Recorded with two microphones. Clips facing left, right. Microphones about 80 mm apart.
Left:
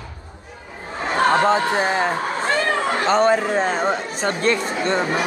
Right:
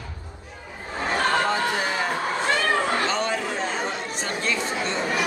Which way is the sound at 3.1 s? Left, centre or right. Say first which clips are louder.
Left 9 dB; left.